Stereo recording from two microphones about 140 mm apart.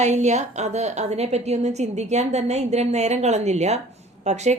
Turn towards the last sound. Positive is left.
turn(degrees=-55)  # may be behind; listen again after turning